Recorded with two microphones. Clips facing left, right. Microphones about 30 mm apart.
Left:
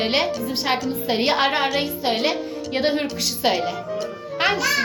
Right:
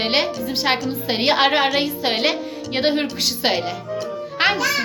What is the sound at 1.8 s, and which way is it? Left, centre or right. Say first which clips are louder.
A woman's voice: right 2 dB; right.